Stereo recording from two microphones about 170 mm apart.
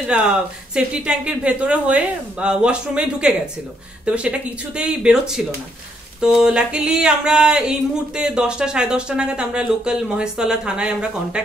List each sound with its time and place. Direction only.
0.0 s speech: 5° right (ahead or behind)